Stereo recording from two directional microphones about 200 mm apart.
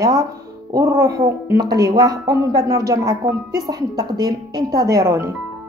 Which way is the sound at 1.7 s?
20° right (ahead or behind).